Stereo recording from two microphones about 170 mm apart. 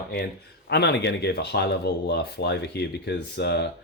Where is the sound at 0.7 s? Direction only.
80° left.